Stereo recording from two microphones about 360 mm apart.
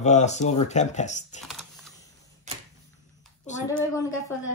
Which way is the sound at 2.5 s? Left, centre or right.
Centre.